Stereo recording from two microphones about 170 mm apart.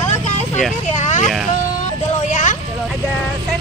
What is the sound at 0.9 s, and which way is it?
Vehicle, 45° left (ahead or behind).